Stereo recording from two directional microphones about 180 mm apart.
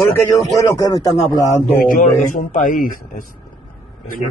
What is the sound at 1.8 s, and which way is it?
A man's voice, 50° left (ahead or behind).